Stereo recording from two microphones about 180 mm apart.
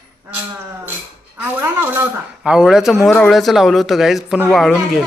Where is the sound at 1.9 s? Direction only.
10° right (ahead or behind).